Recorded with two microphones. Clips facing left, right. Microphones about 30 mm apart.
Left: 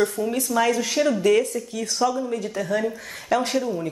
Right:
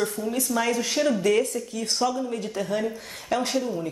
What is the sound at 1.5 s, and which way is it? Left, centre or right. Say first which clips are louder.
Speech: left 2 dB; left.